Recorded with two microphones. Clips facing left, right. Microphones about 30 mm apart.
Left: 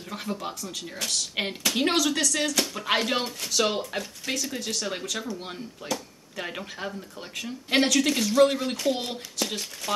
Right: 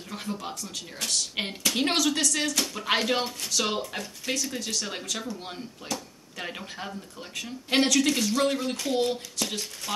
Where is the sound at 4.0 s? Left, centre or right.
Centre.